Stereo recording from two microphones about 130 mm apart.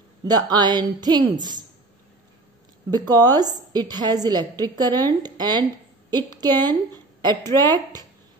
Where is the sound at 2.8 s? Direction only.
30° right (ahead or behind).